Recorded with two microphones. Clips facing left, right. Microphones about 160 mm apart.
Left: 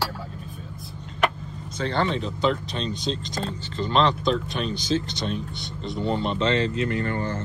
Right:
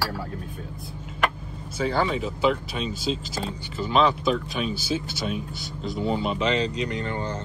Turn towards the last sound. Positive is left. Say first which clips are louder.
# left 2 dB
turn(degrees=-20)  # may be behind; listen again after turning